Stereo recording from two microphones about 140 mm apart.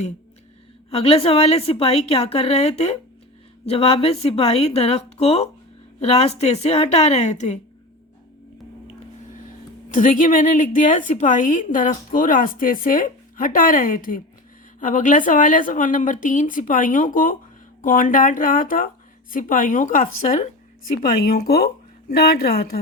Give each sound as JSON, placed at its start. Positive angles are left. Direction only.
{"t": 0.9, "sound": "a woman's voice", "side_deg": 45}
{"t": 9.9, "sound": "a woman's voice", "side_deg": 70}
{"t": 14.8, "sound": "a woman's voice", "side_deg": 65}